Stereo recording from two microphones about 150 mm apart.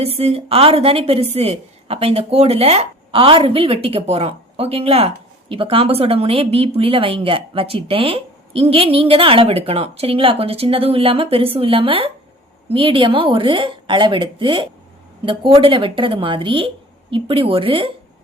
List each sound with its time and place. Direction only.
0.0 s a woman's voice: 40° right (ahead or behind)